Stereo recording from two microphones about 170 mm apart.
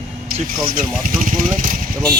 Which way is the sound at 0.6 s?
55° right (ahead or behind).